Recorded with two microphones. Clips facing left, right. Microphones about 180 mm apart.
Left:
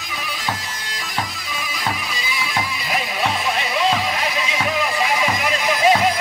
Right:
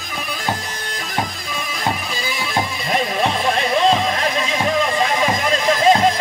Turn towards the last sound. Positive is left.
turn(degrees=-30)  # may be behind; listen again after turning